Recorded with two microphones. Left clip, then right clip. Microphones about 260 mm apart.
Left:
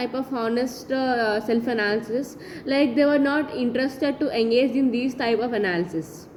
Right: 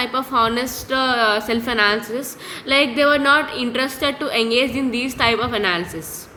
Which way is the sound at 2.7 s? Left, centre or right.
Centre.